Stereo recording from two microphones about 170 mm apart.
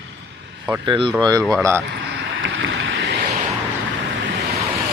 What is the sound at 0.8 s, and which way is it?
Speech, 30° right (ahead or behind).